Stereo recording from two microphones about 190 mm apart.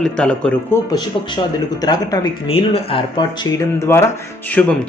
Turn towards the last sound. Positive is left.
turn(degrees=10)  # may be behind; listen again after turning